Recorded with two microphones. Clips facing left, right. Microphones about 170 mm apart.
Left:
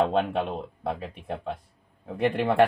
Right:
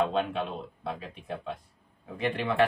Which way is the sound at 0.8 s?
50° left (ahead or behind).